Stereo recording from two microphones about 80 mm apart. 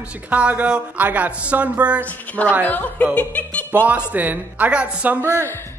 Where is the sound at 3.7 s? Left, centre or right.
Centre.